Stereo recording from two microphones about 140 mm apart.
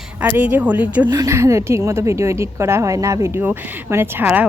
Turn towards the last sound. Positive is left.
turn(degrees=-10)  # may be behind; listen again after turning